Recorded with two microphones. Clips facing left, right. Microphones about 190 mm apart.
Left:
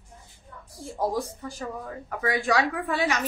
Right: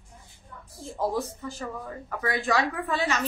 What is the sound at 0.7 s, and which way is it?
A woman's voice, 10° left (ahead or behind).